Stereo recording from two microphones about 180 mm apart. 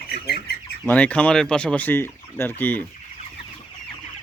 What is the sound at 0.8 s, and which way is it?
Speech, 5° left (ahead or behind).